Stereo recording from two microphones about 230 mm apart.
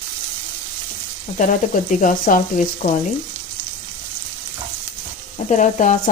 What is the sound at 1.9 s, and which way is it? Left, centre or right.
Speech, left.